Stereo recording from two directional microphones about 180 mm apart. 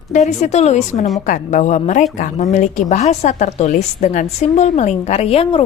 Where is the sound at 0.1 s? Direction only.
40° left (ahead or behind).